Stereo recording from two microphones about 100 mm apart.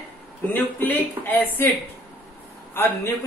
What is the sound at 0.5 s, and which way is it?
A man's voice, 20° left (ahead or behind).